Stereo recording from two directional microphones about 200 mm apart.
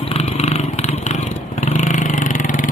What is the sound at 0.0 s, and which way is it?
Motorcycle, 30° left (ahead or behind).